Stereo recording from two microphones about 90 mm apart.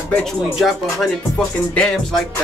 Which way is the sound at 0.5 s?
5° right (ahead or behind).